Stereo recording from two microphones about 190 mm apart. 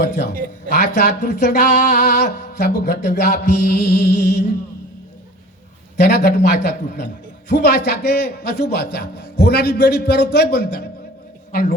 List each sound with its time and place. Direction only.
0.7 s a man's voice: 55° left (ahead or behind)
6.0 s a man's voice: 55° left (ahead or behind)